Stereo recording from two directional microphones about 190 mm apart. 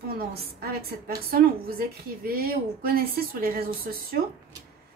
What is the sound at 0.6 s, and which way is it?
A woman's voice, 55° right (ahead or behind).